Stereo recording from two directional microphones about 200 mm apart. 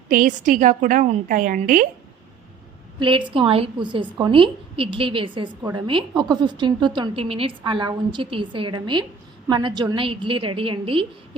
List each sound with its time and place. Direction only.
0.1 s a woman's voice: 40° right (ahead or behind)
3.0 s a woman's voice: 25° right (ahead or behind)